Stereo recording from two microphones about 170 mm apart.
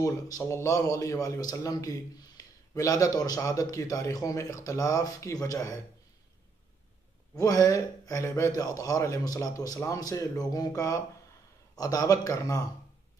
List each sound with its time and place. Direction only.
0.0 s a man's voice: 20° left (ahead or behind)
7.3 s a man's voice: 20° left (ahead or behind)